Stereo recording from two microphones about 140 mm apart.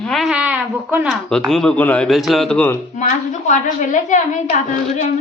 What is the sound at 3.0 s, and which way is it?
A woman's voice, 60° left (ahead or behind).